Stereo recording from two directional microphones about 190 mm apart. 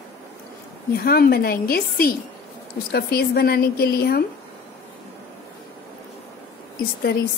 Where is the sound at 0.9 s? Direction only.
55° left (ahead or behind).